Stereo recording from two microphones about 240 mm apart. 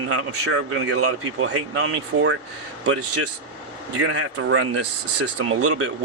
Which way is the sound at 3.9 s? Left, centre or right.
Right.